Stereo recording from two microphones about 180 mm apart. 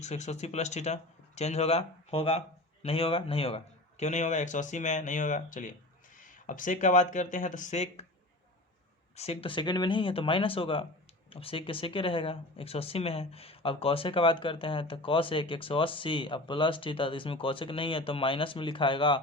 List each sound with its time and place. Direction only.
0.0 s speech: 40° left (ahead or behind)
9.1 s speech: 35° left (ahead or behind)